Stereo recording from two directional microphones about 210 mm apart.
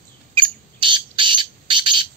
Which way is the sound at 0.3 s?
25° right (ahead or behind).